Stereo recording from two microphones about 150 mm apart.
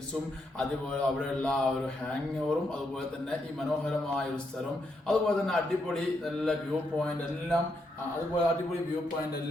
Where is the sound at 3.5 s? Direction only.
5° left (ahead or behind).